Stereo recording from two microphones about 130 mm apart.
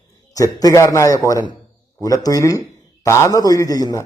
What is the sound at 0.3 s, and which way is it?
A man's voice, 25° left (ahead or behind).